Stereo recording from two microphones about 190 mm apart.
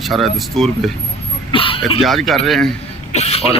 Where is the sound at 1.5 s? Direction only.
25° left (ahead or behind).